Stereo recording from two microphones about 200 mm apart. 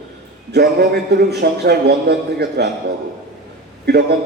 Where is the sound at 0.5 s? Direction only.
55° right (ahead or behind).